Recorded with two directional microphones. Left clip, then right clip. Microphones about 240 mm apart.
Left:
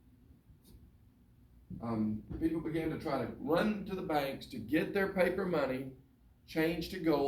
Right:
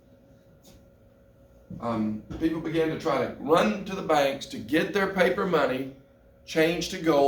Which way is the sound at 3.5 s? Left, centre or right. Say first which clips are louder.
Right 10 dB; centre.